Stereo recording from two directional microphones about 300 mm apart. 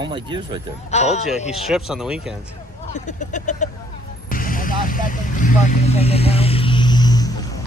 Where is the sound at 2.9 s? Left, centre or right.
Left.